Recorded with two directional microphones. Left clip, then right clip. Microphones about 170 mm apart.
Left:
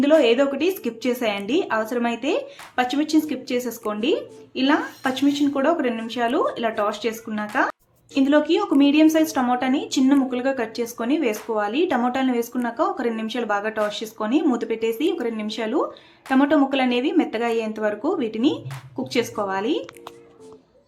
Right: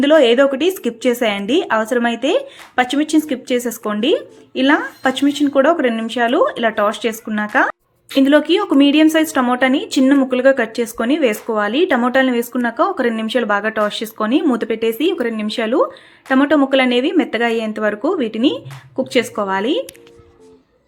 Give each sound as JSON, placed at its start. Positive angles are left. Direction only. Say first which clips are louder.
{"t": 0.0, "sound": "a woman's voice", "louder": "right 6 dB", "side_deg": -30}